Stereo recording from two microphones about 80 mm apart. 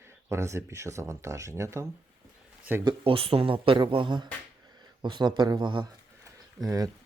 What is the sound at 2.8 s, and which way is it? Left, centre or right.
Speech, right.